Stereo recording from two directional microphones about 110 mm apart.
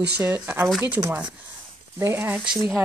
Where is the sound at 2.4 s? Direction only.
5° right (ahead or behind).